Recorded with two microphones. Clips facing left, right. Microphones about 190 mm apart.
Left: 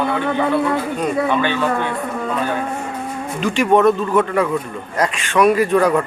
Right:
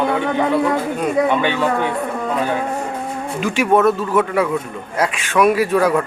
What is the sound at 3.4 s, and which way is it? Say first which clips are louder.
A man's voice: left 1 dB; 10° right (ahead or behind).